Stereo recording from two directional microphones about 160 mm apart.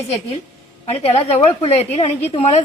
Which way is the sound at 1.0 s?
40° left (ahead or behind).